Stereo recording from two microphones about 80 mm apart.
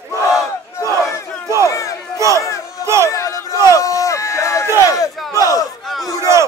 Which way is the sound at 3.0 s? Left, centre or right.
Left.